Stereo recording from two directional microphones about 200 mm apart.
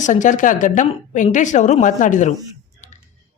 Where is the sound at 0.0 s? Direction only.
40° left (ahead or behind).